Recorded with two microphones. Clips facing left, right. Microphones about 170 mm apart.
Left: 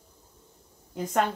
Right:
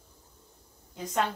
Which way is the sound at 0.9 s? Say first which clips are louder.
Left 4 dB; 55° left (ahead or behind).